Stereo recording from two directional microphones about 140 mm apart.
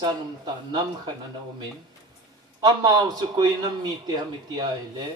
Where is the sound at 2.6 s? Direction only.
30° right (ahead or behind).